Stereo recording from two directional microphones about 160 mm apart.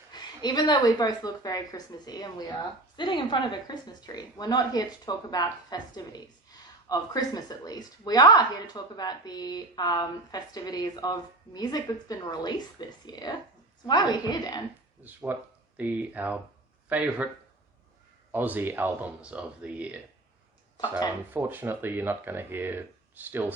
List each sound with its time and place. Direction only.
0.1 s speech: 25° left (ahead or behind)
15.0 s speech: 10° right (ahead or behind)
18.3 s speech: 10° right (ahead or behind)
21.3 s speech: 15° right (ahead or behind)